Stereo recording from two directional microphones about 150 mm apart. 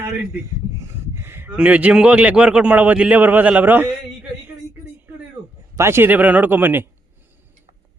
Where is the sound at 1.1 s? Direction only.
15° right (ahead or behind).